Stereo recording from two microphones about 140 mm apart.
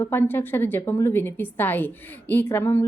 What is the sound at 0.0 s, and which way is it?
A woman's voice, 15° left (ahead or behind).